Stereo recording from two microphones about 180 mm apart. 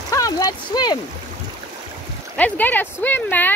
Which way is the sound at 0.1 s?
20° left (ahead or behind).